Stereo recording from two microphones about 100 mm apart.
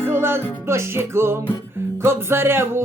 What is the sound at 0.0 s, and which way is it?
Music, 25° right (ahead or behind).